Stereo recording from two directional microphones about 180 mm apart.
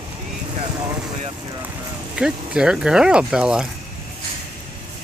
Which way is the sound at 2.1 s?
5° right (ahead or behind).